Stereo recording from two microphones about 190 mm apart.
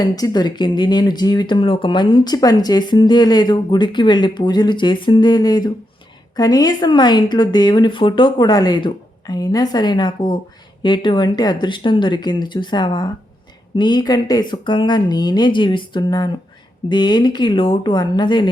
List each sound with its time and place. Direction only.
0.0 s speech: 20° left (ahead or behind)